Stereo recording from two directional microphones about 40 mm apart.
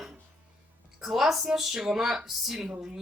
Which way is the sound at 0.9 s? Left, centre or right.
Centre.